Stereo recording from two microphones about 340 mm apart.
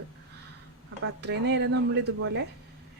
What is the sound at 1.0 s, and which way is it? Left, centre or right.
Speech, right.